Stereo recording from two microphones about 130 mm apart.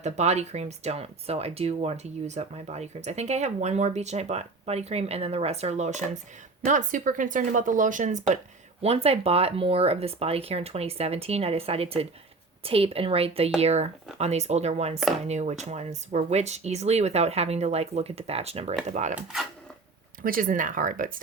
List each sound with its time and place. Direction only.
0.0 s speech: 60° right (ahead or behind)
6.7 s speech: 85° right
8.8 s speech: 50° right (ahead or behind)
18.9 s speech: 65° right (ahead or behind)
20.2 s speech: 90° right